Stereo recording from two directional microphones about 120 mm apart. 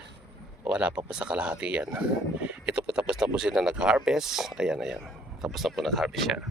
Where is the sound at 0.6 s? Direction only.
10° right (ahead or behind).